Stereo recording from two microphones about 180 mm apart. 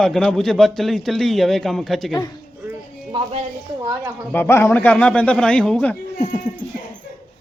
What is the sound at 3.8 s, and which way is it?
Speech, 15° right (ahead or behind).